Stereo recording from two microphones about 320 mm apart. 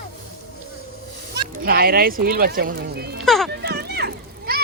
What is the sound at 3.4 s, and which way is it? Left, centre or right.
Children playing, right.